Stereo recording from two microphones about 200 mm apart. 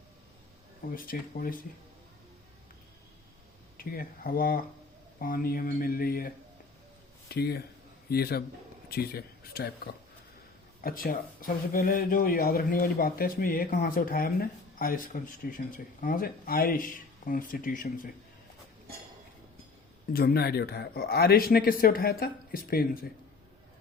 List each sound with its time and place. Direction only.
0.9 s speech: 45° left (ahead or behind)
3.8 s speech: 45° left (ahead or behind)
20.1 s speech: 50° left (ahead or behind)